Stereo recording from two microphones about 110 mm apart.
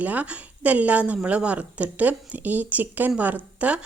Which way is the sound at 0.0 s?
15° right (ahead or behind).